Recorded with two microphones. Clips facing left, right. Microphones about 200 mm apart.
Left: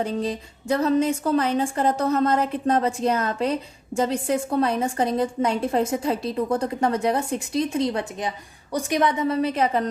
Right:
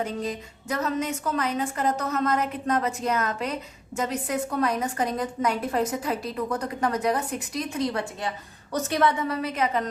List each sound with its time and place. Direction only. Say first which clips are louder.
0.0 s a woman's voice: left 4 dB; 30° left (ahead or behind)